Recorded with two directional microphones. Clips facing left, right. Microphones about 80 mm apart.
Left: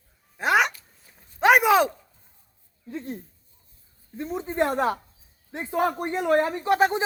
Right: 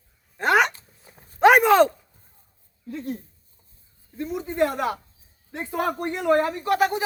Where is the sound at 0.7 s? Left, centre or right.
Right.